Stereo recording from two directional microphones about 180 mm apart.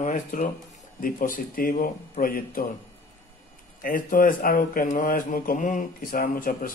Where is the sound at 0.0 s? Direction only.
45° left (ahead or behind).